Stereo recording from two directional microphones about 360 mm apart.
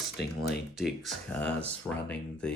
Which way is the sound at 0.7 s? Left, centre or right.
Centre.